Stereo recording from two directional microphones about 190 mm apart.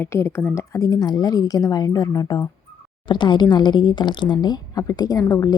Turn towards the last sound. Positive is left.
turn(degrees=20)  # may be behind; listen again after turning